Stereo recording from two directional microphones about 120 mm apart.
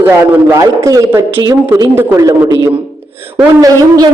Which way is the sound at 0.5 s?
25° right (ahead or behind).